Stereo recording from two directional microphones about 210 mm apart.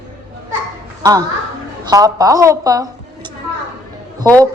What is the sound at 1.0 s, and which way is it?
A woman's voice, 15° right (ahead or behind).